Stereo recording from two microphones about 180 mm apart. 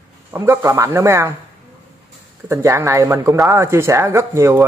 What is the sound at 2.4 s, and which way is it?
Speech, 15° right (ahead or behind).